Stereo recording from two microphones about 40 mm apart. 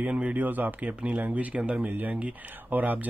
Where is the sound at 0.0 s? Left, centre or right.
Right.